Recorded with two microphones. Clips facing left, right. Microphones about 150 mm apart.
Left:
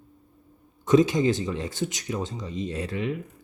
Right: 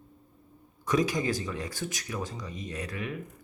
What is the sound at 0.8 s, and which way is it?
Speech, 25° left (ahead or behind).